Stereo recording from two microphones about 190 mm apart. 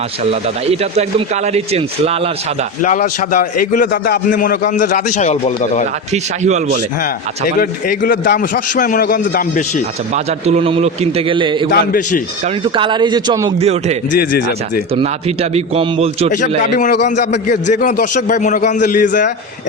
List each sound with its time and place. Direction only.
0.3 s a man's voice: 30° right (ahead or behind)
2.8 s a man's voice: 40° left (ahead or behind)
6.4 s a man's voice: 40° right (ahead or behind)
7.6 s a man's voice: 45° left (ahead or behind)
10.4 s a man's voice: 30° right (ahead or behind)
11.7 s a man's voice: 45° left (ahead or behind)
12.6 s a man's voice: 25° right (ahead or behind)
13.6 s a man's voice: 35° right (ahead or behind)
14.9 s a man's voice: 35° right (ahead or behind)
16.3 s a man's voice: 40° left (ahead or behind)
16.9 s a man's voice: 60° left (ahead or behind)
18.1 s a man's voice: 40° left (ahead or behind)